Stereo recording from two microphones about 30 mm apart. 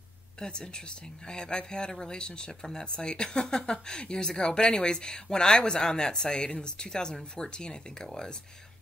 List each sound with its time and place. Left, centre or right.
0.4 s speech: left
1.9 s speech: centre
2.1 s speech: left